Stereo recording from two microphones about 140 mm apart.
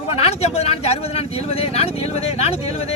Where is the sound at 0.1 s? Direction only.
50° left (ahead or behind).